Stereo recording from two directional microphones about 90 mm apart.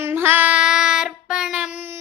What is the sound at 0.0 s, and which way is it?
Child singing, 25° right (ahead or behind).